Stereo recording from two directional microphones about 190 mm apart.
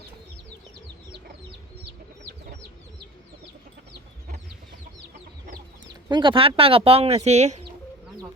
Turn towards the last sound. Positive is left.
turn(degrees=-35)  # may be behind; listen again after turning